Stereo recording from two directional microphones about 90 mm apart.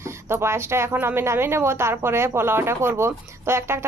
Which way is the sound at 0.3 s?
30° right (ahead or behind).